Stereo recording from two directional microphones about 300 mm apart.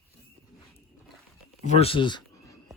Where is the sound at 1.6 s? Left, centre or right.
Left.